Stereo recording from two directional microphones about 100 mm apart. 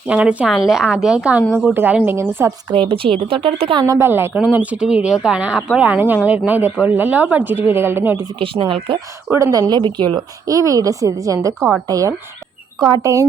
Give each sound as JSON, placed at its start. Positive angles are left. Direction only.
{"t": 0.1, "sound": "a woman's voice", "side_deg": -15}
{"t": 2.7, "sound": "speech", "side_deg": -65}
{"t": 3.9, "sound": "speech", "side_deg": -25}
{"t": 8.4, "sound": "speech", "side_deg": -60}
{"t": 9.3, "sound": "speech", "side_deg": -35}
{"t": 10.4, "sound": "a woman's voice", "side_deg": -35}